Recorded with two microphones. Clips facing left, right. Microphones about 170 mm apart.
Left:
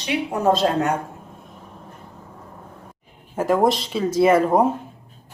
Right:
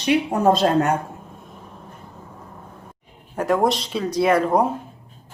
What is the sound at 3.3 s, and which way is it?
Speech, centre (ahead or behind).